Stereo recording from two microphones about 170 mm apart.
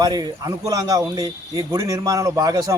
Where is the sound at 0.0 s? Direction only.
20° right (ahead or behind).